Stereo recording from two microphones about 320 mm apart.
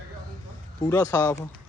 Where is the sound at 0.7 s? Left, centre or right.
Centre.